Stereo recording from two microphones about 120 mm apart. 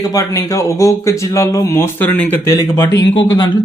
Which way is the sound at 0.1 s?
30° left (ahead or behind).